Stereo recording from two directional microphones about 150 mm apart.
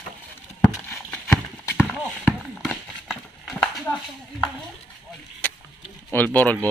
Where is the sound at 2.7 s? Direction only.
Centre (ahead or behind).